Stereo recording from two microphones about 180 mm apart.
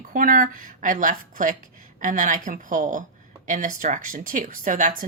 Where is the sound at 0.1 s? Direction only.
50° right (ahead or behind).